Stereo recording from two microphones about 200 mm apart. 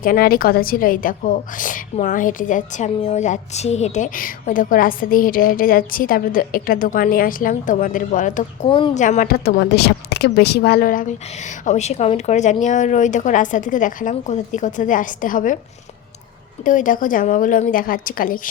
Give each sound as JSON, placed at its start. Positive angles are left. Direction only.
{"t": 0.0, "sound": "a woman's voice", "side_deg": 45}
{"t": 8.6, "sound": "speech", "side_deg": 25}
{"t": 9.0, "sound": "a woman's voice", "side_deg": 45}
{"t": 16.6, "sound": "a woman's voice", "side_deg": 40}